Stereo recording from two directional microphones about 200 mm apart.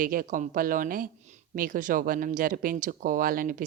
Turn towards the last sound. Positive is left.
turn(degrees=-45)  # may be behind; listen again after turning